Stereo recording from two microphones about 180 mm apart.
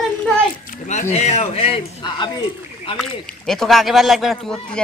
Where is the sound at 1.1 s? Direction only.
35° left (ahead or behind).